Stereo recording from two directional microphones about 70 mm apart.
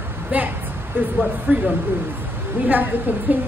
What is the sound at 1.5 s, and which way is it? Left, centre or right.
Speech, right.